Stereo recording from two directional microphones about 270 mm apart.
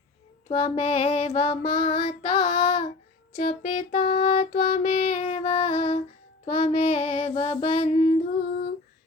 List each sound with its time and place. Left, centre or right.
0.4 s music: left